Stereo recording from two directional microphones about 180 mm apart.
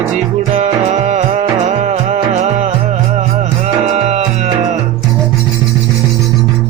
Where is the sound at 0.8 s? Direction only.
40° right (ahead or behind).